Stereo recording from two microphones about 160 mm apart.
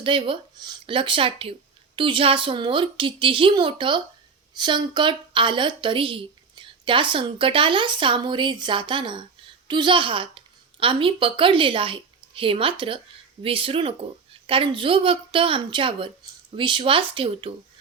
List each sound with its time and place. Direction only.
0.0 s a woman's voice: 35° right (ahead or behind)